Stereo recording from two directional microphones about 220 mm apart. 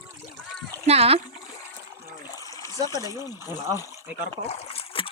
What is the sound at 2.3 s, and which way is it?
Trickle, 15° left (ahead or behind).